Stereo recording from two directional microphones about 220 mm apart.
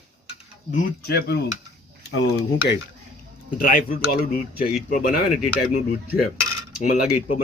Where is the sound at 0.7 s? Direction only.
45° left (ahead or behind).